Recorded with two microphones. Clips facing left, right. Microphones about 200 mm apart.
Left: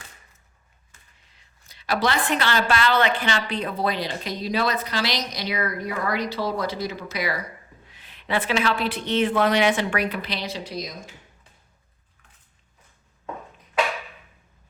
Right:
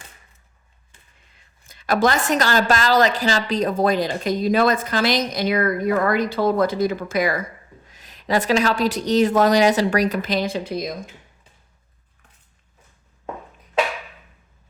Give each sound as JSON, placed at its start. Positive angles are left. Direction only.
{"t": 1.6, "sound": "a woman's voice", "side_deg": -50}